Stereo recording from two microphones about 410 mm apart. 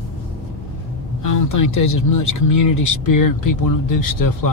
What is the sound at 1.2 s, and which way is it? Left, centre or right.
Speech, left.